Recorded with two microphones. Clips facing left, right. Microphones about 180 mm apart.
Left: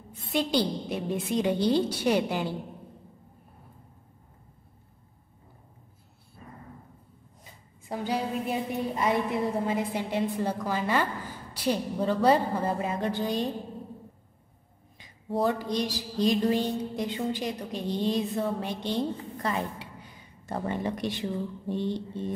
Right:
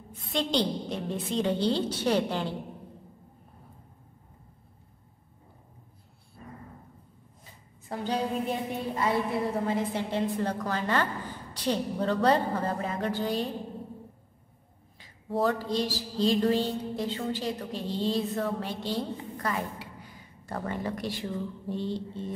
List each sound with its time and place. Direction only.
0.2 s music: 10° left (ahead or behind)
7.9 s music: 10° left (ahead or behind)
15.4 s music: 15° left (ahead or behind)